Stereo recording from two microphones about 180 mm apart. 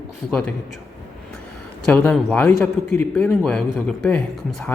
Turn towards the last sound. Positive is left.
turn(degrees=5)  # may be behind; listen again after turning